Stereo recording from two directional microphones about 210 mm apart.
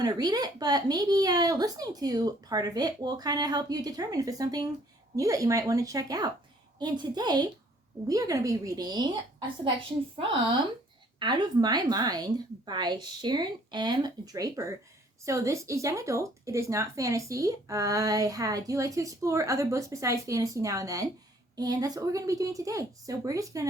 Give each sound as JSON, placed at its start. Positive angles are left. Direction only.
{"t": 0.0, "sound": "speech", "side_deg": -20}
{"t": 10.2, "sound": "speech", "side_deg": -25}